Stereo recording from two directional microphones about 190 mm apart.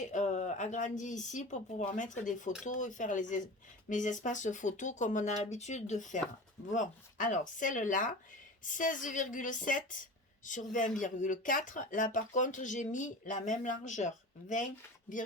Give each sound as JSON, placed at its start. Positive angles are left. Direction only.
{"t": 0.0, "sound": "a woman's voice", "side_deg": 40}